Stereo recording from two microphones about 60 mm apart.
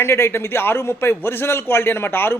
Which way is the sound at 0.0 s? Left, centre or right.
Left.